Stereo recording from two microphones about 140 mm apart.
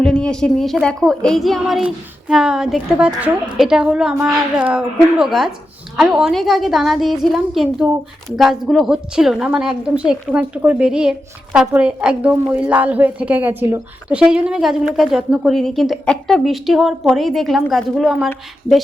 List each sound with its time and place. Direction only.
0.0 s a woman's voice: 5° left (ahead or behind)